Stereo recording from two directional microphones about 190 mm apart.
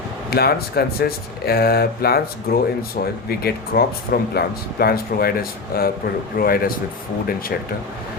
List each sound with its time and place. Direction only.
0.3 s speech: 55° left (ahead or behind)